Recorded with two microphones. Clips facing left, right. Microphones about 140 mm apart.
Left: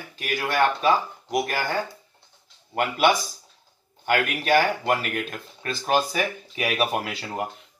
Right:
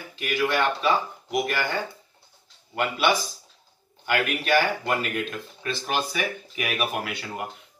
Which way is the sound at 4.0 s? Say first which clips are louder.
Left 2 dB; 40° left (ahead or behind).